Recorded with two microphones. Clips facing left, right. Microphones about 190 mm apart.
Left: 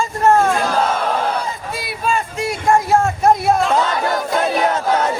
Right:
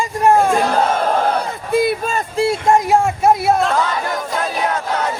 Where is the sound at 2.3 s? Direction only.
30° right (ahead or behind).